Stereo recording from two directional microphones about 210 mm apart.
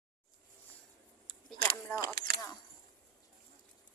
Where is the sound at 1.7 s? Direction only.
10° left (ahead or behind).